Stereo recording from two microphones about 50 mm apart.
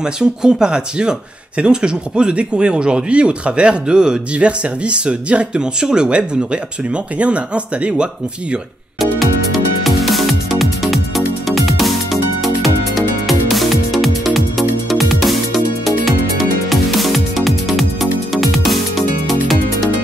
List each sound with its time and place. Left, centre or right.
0.0 s speech: centre
9.0 s music: centre